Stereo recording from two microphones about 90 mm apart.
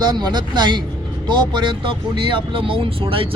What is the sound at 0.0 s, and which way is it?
A man's voice, 55° right (ahead or behind).